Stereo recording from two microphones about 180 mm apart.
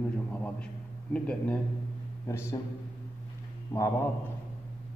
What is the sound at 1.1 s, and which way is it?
Speech, 5° left (ahead or behind).